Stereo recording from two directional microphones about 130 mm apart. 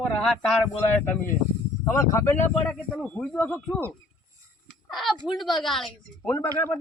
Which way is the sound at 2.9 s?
10° left (ahead or behind).